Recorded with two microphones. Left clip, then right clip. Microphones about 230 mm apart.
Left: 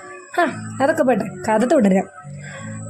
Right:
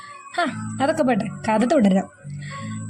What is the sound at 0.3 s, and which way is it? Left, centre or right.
A woman's voice, right.